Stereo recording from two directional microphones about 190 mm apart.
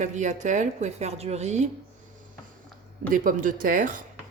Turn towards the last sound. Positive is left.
turn(degrees=-45)  # may be behind; listen again after turning